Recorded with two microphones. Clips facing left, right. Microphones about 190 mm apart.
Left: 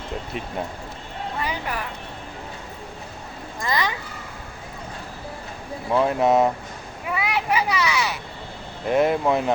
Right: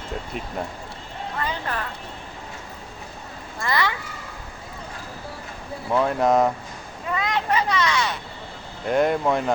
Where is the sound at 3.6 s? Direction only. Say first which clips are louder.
Right 1 dB; 20° left (ahead or behind).